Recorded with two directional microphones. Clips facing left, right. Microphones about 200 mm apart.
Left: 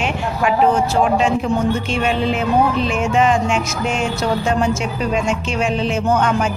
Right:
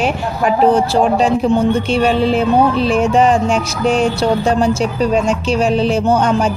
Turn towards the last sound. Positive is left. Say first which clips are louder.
# right 3 dB
turn(degrees=-35)  # may be behind; listen again after turning